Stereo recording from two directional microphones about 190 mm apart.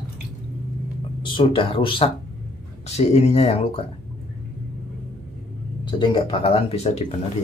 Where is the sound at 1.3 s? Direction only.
25° left (ahead or behind).